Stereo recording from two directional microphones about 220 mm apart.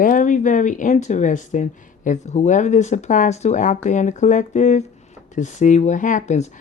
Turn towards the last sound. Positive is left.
turn(degrees=35)  # may be behind; listen again after turning